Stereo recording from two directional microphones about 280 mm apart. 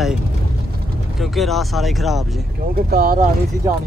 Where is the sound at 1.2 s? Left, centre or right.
Centre.